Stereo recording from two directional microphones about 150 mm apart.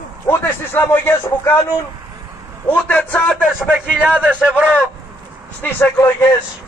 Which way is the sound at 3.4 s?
5° right (ahead or behind).